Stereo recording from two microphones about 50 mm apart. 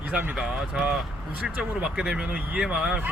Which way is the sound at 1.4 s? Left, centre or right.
Right.